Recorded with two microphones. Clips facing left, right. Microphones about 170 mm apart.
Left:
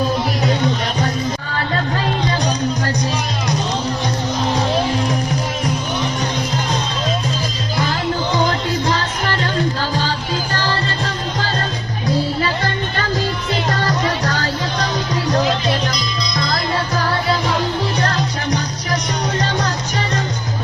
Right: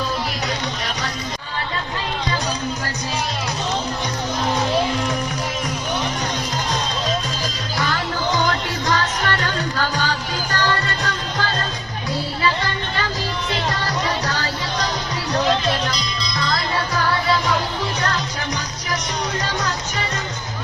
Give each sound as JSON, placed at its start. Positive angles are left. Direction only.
{"t": 8.4, "sound": "music", "side_deg": 30}
{"t": 12.4, "sound": "music", "side_deg": 45}
{"t": 16.4, "sound": "music", "side_deg": 35}
{"t": 18.0, "sound": "music", "side_deg": 35}